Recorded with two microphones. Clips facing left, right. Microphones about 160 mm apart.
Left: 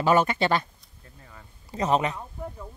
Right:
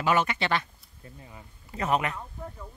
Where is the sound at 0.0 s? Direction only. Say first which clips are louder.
Left 4 dB; 40° left (ahead or behind).